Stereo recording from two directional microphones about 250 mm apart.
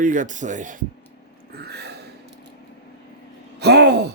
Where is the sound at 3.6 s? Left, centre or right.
Right.